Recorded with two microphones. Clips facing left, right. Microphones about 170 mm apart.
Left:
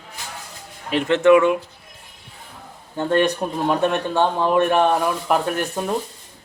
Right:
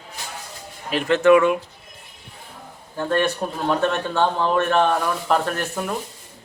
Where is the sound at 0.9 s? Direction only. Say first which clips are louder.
Left 1 dB; 20° left (ahead or behind).